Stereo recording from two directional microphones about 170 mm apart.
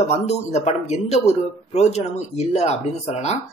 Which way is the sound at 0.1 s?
40° left (ahead or behind).